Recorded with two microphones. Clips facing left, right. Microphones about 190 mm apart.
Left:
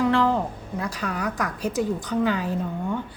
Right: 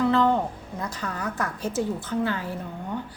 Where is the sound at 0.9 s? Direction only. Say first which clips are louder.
Left 3 dB; 10° left (ahead or behind).